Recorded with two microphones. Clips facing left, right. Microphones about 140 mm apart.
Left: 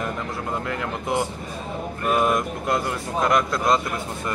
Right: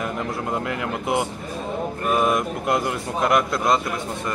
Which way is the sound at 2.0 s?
Centre (ahead or behind).